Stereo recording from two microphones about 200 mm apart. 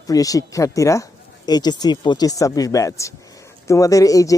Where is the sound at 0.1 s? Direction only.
15° left (ahead or behind).